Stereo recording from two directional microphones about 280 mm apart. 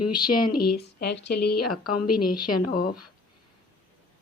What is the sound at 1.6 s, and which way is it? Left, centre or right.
Speech, left.